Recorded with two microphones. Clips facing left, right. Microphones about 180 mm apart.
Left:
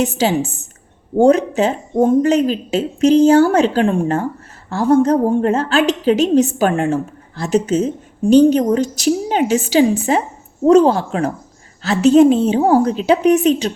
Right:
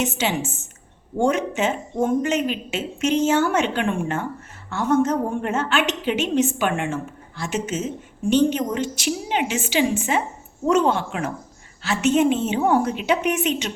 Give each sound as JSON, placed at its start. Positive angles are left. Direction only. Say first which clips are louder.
{"t": 0.0, "sound": "a woman's voice", "louder": "left 7 dB", "side_deg": 35}